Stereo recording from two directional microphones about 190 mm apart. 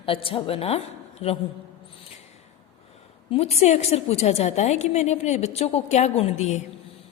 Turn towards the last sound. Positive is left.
turn(degrees=35)  # may be behind; listen again after turning